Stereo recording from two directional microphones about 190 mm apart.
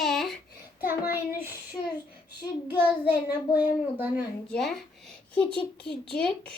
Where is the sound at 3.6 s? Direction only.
10° right (ahead or behind).